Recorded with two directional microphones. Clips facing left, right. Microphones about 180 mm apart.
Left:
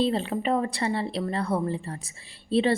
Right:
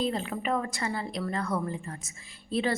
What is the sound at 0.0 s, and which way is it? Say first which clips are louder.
A woman's voice: left 5 dB; 30° left (ahead or behind).